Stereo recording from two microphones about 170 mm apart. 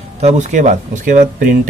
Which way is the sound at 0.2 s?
40° right (ahead or behind).